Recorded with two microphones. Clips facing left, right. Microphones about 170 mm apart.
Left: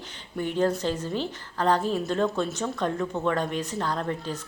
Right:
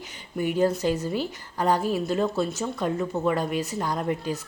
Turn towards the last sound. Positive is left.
turn(degrees=-10)  # may be behind; listen again after turning